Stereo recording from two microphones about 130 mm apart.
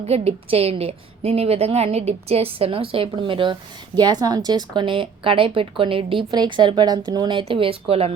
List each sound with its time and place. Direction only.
0.0 s a woman's voice: 50° right (ahead or behind)